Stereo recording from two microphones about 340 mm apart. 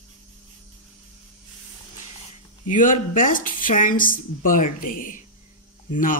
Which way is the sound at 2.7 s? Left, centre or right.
Left.